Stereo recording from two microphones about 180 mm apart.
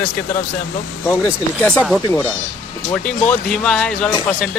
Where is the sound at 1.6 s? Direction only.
Centre (ahead or behind).